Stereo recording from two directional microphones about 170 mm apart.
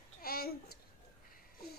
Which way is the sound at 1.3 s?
65° left (ahead or behind).